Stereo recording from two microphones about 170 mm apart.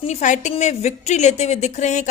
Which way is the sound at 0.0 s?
45° left (ahead or behind).